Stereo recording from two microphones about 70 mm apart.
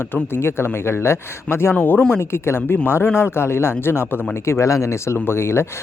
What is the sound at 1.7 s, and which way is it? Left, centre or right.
Speech, centre.